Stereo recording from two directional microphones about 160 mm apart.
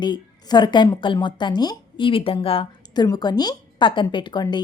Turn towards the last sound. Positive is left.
turn(degrees=30)  # may be behind; listen again after turning